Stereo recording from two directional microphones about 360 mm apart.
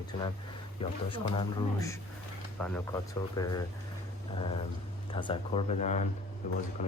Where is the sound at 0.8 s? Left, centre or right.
Centre.